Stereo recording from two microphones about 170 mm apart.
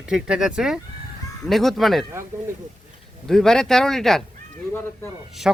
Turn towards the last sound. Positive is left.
turn(degrees=-5)  # may be behind; listen again after turning